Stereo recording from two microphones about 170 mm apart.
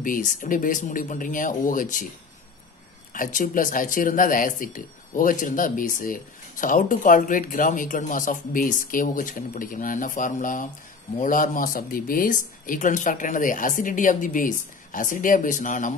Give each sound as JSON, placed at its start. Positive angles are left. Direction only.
{"t": 0.0, "sound": "speech", "side_deg": 50}
{"t": 3.1, "sound": "speech", "side_deg": 50}